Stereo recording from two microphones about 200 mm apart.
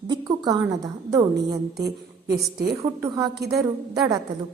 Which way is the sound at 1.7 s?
55° right (ahead or behind).